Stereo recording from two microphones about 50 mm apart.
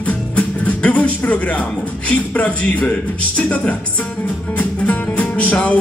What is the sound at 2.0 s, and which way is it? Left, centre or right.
A man's voice, left.